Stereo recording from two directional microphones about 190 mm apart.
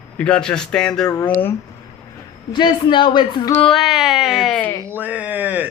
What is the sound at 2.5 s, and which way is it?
Speech, 25° left (ahead or behind).